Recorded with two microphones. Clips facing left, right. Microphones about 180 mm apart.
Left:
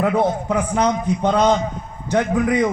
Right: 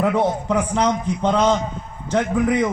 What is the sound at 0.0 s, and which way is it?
A man's voice, 5° left (ahead or behind).